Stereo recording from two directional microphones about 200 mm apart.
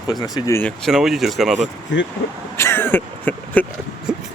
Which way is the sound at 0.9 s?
Centre (ahead or behind).